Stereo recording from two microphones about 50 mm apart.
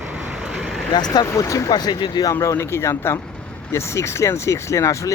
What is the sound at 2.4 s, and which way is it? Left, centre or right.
Speech, left.